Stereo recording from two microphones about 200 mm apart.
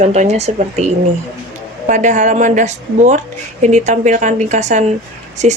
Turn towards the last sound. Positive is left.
turn(degrees=-35)  # may be behind; listen again after turning